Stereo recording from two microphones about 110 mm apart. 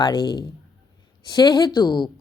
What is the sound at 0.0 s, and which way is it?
Speech, 40° left (ahead or behind).